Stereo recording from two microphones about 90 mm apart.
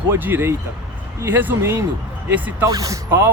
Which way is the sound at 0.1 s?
25° right (ahead or behind).